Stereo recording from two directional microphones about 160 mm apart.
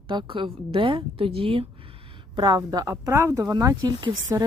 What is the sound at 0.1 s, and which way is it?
A woman's voice, 30° right (ahead or behind).